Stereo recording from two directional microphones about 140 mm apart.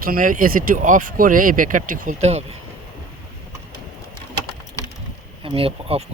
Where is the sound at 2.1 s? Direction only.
50° right (ahead or behind).